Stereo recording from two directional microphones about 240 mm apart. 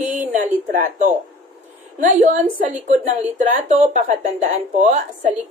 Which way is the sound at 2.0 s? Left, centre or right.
Right.